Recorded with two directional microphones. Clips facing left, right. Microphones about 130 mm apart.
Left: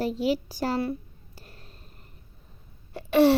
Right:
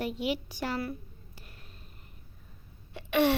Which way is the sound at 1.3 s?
35° left (ahead or behind).